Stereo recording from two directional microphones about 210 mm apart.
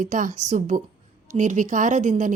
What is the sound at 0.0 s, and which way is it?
A woman's voice, 35° right (ahead or behind).